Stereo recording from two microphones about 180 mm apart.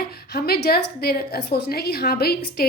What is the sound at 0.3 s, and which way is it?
A woman's voice, 60° left (ahead or behind).